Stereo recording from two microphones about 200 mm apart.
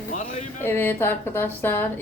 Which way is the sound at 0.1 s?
40° left (ahead or behind).